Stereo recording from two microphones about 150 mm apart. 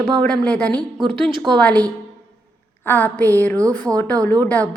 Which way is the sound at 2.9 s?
10° left (ahead or behind).